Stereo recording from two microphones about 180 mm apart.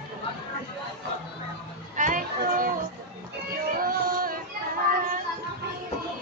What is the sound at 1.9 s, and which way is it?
Children playing, 45° right (ahead or behind).